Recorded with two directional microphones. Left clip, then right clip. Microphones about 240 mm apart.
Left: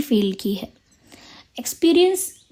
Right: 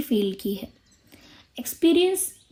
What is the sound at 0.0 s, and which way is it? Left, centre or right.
A woman's voice, left.